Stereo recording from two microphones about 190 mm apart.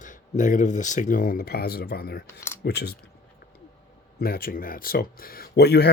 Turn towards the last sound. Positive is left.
turn(degrees=60)  # may be behind; listen again after turning